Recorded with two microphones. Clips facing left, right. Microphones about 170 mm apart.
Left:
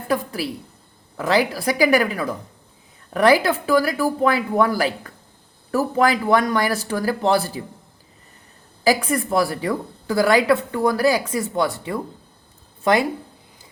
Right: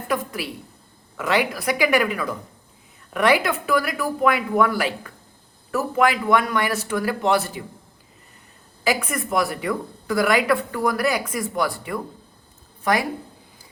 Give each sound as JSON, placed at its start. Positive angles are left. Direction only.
{"t": 0.1, "sound": "speech", "side_deg": 35}
{"t": 8.8, "sound": "a woman's voice", "side_deg": 35}